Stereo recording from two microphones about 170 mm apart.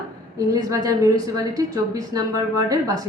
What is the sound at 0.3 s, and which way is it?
A woman's voice, 20° right (ahead or behind).